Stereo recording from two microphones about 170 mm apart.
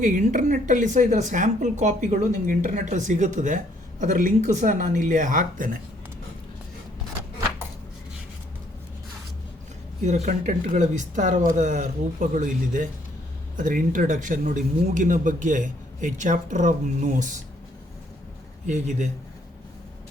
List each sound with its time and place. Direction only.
0.0 s speech: 50° right (ahead or behind)
10.0 s speech: 45° right (ahead or behind)
18.6 s speech: 45° right (ahead or behind)